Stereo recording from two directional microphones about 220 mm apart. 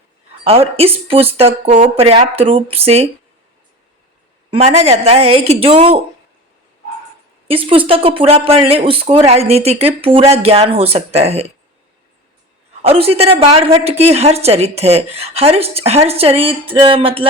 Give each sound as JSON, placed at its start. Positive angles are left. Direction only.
{"t": 0.4, "sound": "a woman's voice", "side_deg": -25}
{"t": 4.5, "sound": "a woman's voice", "side_deg": -30}
{"t": 7.4, "sound": "a woman's voice", "side_deg": -25}
{"t": 12.8, "sound": "a woman's voice", "side_deg": -25}